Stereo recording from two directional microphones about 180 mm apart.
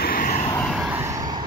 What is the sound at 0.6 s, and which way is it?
Vehicle, 5° right (ahead or behind).